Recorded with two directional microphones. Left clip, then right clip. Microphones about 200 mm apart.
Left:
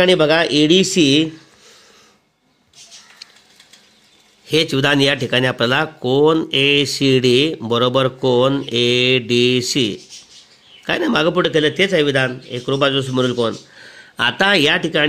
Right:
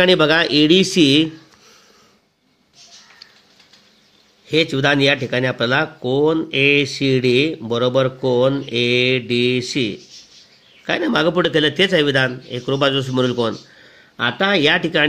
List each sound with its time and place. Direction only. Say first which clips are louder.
0.0 s a man's voice: left 1 dB; 10° left (ahead or behind)
4.5 s a man's voice: left 1 dB; 20° left (ahead or behind); by 13.6 s 5° left (ahead or behind)
13.7 s a sound: left 3 dB; 20° left (ahead or behind)
14.9 s a man's voice: left 1 dB; 10° left (ahead or behind)